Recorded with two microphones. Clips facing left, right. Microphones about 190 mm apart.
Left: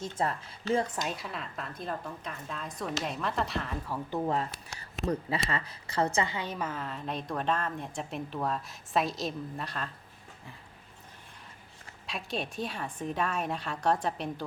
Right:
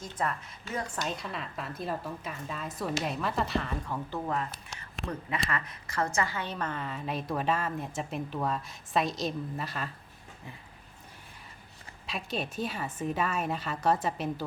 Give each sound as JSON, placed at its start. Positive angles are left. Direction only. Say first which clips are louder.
{"t": 0.0, "sound": "a woman's voice", "louder": "left 2 dB", "side_deg": 25}
{"t": 1.0, "sound": "a woman's voice", "louder": "right 1 dB", "side_deg": 5}
{"t": 5.0, "sound": "a woman's voice", "louder": "left 3 dB", "side_deg": 30}
{"t": 12.0, "sound": "a woman's voice", "louder": "right 1 dB", "side_deg": 0}